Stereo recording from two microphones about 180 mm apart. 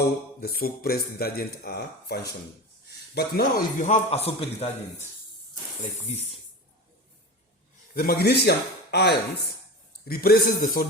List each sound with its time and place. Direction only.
0.3 s a man's voice: 55° left (ahead or behind); by 5.0 s 35° left (ahead or behind)
7.9 s speech: 60° left (ahead or behind)
10.1 s speech: 55° left (ahead or behind)